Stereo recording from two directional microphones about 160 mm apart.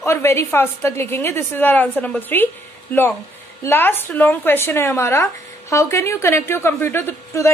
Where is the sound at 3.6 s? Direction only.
15° left (ahead or behind).